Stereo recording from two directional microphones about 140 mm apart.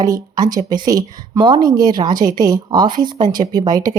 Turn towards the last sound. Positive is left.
turn(degrees=-25)  # may be behind; listen again after turning